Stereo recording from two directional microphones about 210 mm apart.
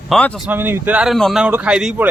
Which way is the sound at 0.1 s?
5° left (ahead or behind).